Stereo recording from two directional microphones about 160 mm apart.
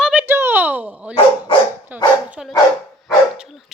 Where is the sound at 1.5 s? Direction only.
35° left (ahead or behind).